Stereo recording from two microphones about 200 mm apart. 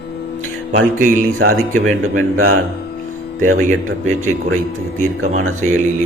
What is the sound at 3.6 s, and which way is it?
Speech, 40° right (ahead or behind).